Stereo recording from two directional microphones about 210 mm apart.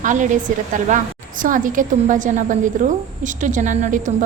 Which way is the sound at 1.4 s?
40° right (ahead or behind).